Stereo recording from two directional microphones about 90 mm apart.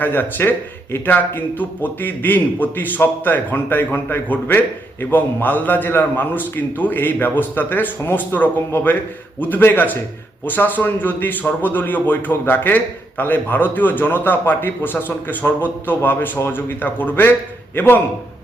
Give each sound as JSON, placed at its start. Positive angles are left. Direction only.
{"t": 0.0, "sound": "a man's voice", "side_deg": 20}